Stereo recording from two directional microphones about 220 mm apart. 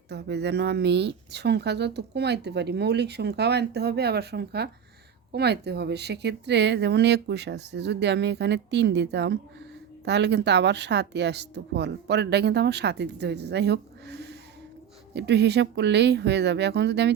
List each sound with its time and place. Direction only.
0.1 s speech: 50° right (ahead or behind)